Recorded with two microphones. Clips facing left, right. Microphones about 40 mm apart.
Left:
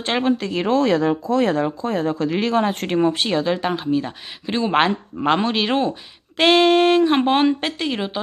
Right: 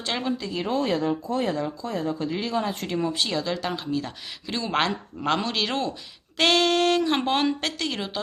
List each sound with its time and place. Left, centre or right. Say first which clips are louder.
0.0 s speech: left 8 dB; left
1.5 s speech: left 7 dB; left
2.1 s speech: left 7 dB; left